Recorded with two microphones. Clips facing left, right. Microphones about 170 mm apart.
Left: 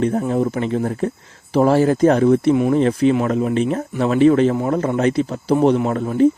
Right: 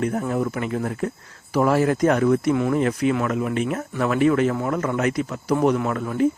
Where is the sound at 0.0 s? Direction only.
30° left (ahead or behind).